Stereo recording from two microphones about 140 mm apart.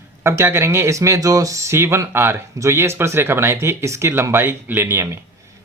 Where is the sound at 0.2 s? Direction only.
15° right (ahead or behind).